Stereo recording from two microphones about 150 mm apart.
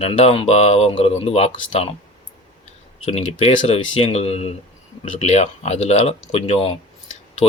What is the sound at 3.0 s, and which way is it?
Speech, 50° left (ahead or behind).